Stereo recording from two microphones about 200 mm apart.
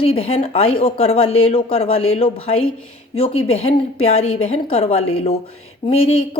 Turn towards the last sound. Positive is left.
turn(degrees=30)  # may be behind; listen again after turning